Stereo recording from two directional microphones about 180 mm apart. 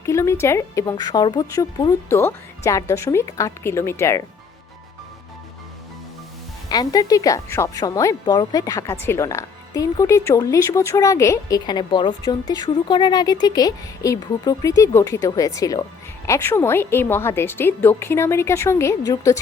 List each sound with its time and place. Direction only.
0.0 s a woman's voice: 15° left (ahead or behind)
6.7 s a woman's voice: 20° left (ahead or behind)